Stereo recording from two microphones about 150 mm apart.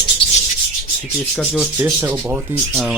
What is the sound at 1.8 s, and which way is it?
Speech, 15° right (ahead or behind).